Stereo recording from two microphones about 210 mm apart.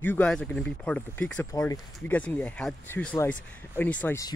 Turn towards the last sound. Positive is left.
turn(degrees=10)  # may be behind; listen again after turning